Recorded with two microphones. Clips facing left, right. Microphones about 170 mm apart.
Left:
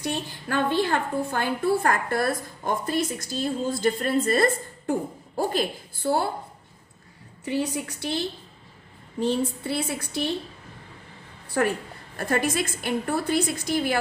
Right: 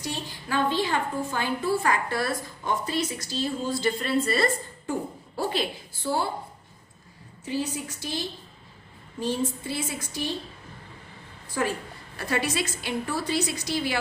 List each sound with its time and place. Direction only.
0.0 s a woman's voice: 55° left (ahead or behind)
7.4 s a woman's voice: 65° left (ahead or behind)
11.4 s a woman's voice: 65° left (ahead or behind)
12.1 s a woman's voice: 50° left (ahead or behind)